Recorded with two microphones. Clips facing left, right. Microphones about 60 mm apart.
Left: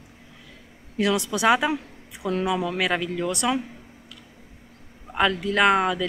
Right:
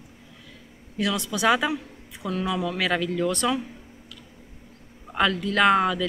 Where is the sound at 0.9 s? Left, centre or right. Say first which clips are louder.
Left 3 dB; left.